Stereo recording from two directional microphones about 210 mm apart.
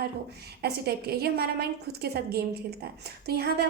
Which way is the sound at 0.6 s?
50° right (ahead or behind).